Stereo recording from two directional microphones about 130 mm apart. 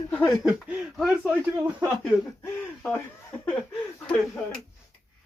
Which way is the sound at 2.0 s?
10° left (ahead or behind).